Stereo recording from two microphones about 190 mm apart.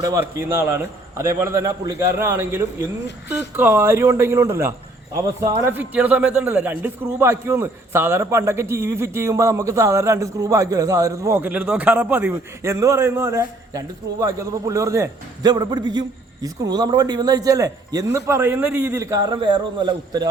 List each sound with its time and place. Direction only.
0.0 s a man's voice: 15° right (ahead or behind)